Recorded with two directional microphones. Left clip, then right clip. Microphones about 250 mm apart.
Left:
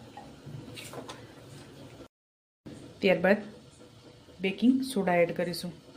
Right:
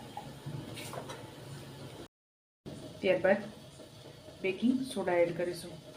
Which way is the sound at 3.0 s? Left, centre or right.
Left.